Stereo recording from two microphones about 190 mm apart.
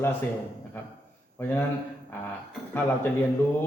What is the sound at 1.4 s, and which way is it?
Speech, 10° left (ahead or behind).